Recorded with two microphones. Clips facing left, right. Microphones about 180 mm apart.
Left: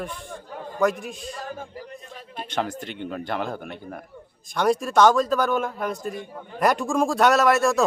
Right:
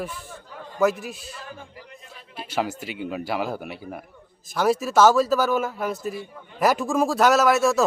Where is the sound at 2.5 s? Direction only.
5° right (ahead or behind).